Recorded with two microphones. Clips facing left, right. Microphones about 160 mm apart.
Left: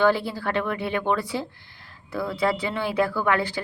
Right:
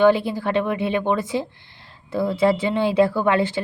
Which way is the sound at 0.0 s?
20° right (ahead or behind).